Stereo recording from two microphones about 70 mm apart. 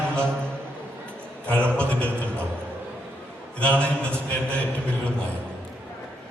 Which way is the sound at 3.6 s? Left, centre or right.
Centre.